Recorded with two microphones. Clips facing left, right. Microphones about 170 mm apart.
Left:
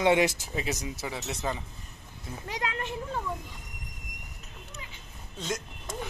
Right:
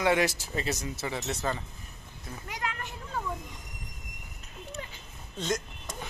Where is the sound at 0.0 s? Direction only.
20° left (ahead or behind).